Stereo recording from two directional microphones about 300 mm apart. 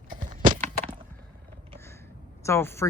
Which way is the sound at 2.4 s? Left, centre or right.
Centre.